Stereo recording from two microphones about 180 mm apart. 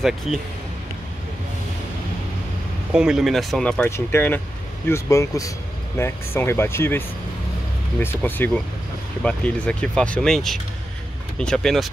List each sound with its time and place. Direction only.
0.3 s speech: centre (ahead or behind)
2.9 s speech: 5° right (ahead or behind)